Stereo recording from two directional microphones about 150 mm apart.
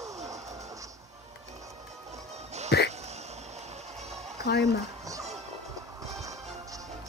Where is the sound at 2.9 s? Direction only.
45° right (ahead or behind).